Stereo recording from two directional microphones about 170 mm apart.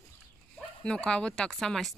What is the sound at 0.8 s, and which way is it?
A woman's voice, 5° left (ahead or behind).